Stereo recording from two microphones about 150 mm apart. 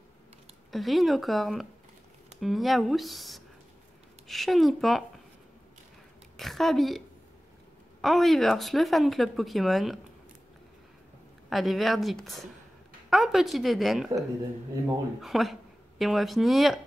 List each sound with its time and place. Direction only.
0.7 s speech: centre (ahead or behind)
6.3 s a sound: centre (ahead or behind)
8.0 s speech: centre (ahead or behind)
11.4 s speech: centre (ahead or behind)
15.2 s speech: centre (ahead or behind)